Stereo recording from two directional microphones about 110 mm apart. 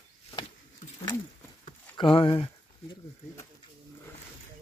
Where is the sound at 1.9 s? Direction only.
55° left (ahead or behind).